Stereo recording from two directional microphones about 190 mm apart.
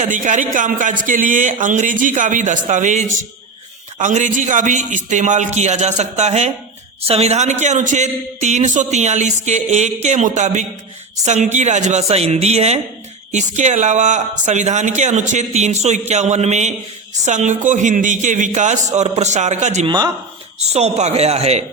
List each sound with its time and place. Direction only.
0.0 s a man's voice: 40° right (ahead or behind)